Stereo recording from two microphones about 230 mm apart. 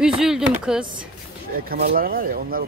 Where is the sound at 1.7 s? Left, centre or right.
Right.